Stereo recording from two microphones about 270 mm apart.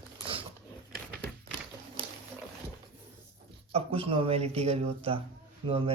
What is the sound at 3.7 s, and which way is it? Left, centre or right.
Speech, right.